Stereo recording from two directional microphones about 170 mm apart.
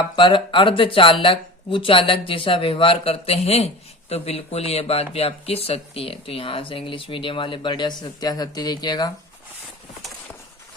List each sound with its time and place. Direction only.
0.2 s speech: 30° left (ahead or behind)